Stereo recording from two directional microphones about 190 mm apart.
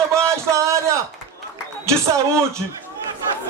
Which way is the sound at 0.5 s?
15° right (ahead or behind).